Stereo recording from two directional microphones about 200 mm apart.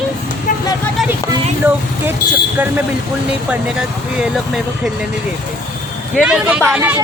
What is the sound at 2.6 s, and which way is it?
Speech, 5° right (ahead or behind).